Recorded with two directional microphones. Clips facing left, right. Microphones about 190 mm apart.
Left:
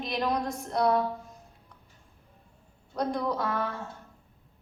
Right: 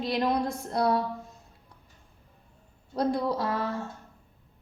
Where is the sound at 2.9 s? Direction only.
30° right (ahead or behind).